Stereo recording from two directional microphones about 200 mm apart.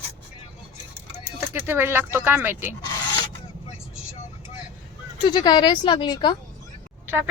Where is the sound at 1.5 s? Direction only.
10° right (ahead or behind).